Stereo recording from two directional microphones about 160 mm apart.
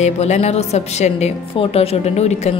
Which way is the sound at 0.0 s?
45° left (ahead or behind).